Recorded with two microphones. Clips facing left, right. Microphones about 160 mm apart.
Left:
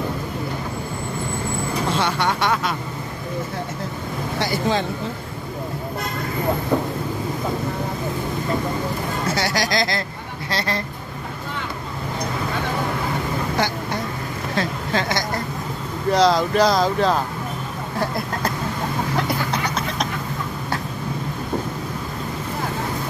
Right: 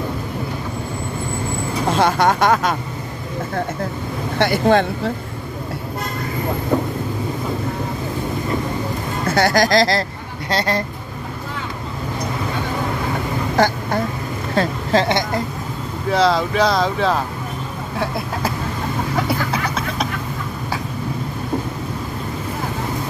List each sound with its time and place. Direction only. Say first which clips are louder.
1.9 s speech: right 7 dB; 45° right (ahead or behind)
4.4 s speech: right 7 dB; 60° right (ahead or behind)
9.3 s speech: right 9 dB; 50° right (ahead or behind)
14.6 s a woman's voice: right 6 dB; 35° right (ahead or behind)
16.1 s speech: even; centre (ahead or behind)
19.1 s vehicle: right 4 dB; 5° right (ahead or behind)